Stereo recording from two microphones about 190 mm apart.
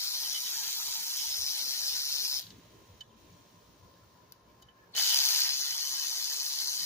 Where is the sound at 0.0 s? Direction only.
15° left (ahead or behind).